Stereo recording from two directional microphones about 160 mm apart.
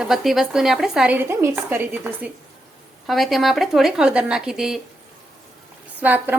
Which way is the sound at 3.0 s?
Centre (ahead or behind).